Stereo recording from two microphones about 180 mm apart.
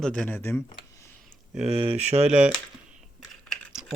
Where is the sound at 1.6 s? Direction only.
35° right (ahead or behind).